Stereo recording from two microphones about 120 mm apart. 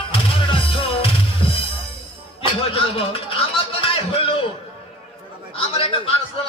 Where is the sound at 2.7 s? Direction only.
50° left (ahead or behind).